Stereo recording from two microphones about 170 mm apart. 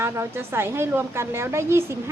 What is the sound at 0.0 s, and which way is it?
A woman's voice, 15° right (ahead or behind).